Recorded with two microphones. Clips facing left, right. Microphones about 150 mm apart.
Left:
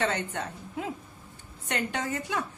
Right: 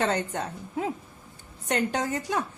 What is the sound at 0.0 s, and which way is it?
A woman's voice, 40° right (ahead or behind).